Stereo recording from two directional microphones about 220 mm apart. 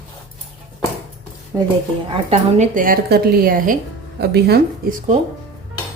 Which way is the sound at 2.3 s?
35° right (ahead or behind).